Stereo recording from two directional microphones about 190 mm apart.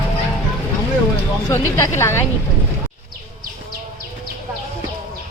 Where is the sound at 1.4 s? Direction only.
15° left (ahead or behind).